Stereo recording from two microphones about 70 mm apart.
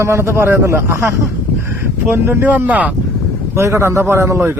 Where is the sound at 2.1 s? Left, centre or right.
Right.